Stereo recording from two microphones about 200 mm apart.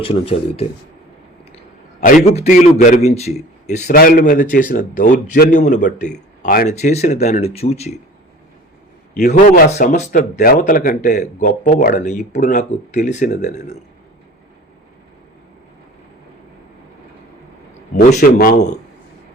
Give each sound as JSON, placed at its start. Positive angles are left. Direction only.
{"t": 0.0, "sound": "speech", "side_deg": 30}
{"t": 2.0, "sound": "a man's voice", "side_deg": 40}
{"t": 9.1, "sound": "a man's voice", "side_deg": 45}
{"t": 17.9, "sound": "a man's voice", "side_deg": 40}